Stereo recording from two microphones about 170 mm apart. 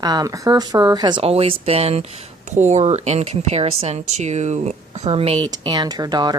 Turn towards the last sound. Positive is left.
turn(degrees=-25)  # may be behind; listen again after turning